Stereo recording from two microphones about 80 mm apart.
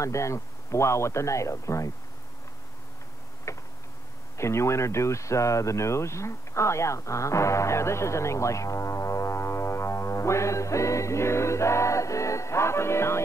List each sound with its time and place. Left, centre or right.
0.0 s speech: left
3.5 s tick-tock: left
4.4 s speech: left